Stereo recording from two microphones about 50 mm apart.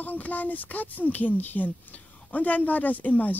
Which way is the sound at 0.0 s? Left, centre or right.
Left.